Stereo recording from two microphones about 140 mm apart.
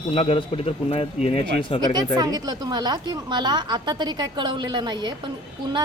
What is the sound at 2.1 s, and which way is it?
A woman's voice, 25° right (ahead or behind).